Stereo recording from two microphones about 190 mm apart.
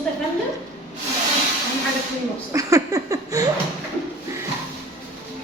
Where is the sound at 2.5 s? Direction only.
20° right (ahead or behind).